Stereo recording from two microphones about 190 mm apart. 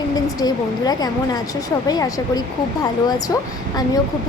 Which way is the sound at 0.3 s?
20° left (ahead or behind).